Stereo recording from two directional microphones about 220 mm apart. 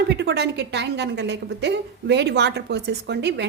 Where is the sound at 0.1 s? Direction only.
50° right (ahead or behind).